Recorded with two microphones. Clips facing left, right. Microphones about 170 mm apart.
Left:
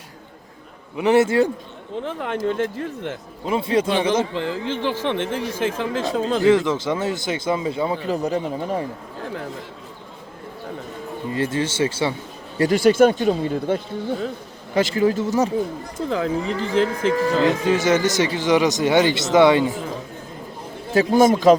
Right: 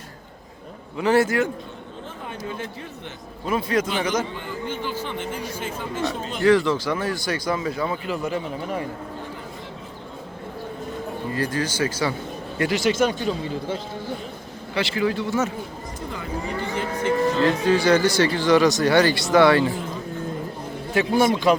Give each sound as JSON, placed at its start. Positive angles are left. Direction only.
{"t": 0.9, "sound": "speech", "side_deg": 20}
{"t": 2.0, "sound": "speech", "side_deg": 75}
{"t": 3.4, "sound": "speech", "side_deg": 25}
{"t": 4.4, "sound": "speech", "side_deg": 90}
{"t": 6.4, "sound": "speech", "side_deg": 20}
{"t": 8.0, "sound": "speech", "side_deg": 40}
{"t": 11.3, "sound": "speech", "side_deg": 25}
{"t": 12.7, "sound": "speech", "side_deg": 55}
{"t": 14.8, "sound": "speech", "side_deg": 40}
{"t": 16.0, "sound": "speech", "side_deg": 90}
{"t": 17.4, "sound": "speech", "side_deg": 20}
{"t": 20.9, "sound": "a man's voice", "side_deg": 40}